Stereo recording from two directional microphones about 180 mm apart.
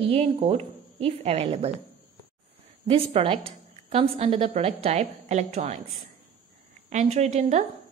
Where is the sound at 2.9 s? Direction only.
30° right (ahead or behind).